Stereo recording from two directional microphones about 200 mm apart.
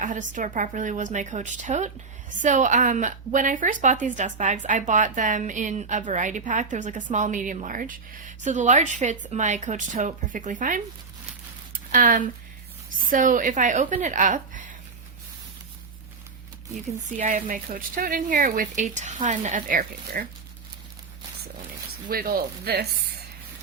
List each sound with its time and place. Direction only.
0.0 s a woman's voice: 40° right (ahead or behind)
11.9 s a woman's voice: 40° right (ahead or behind)
17.2 s a woman's voice: 40° right (ahead or behind)
22.1 s speech: 50° right (ahead or behind)